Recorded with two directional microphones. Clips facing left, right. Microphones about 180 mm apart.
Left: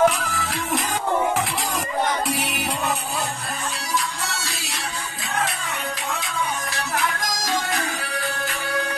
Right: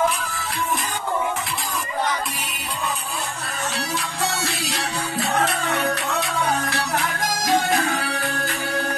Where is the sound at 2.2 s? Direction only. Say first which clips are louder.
Left 6 dB; 80° left.